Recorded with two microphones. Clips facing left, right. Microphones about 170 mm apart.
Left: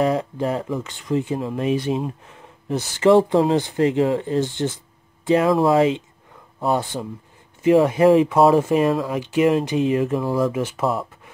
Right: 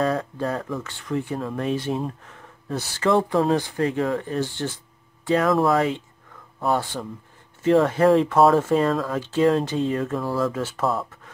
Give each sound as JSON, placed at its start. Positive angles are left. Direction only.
{"t": 0.0, "sound": "speech", "side_deg": 20}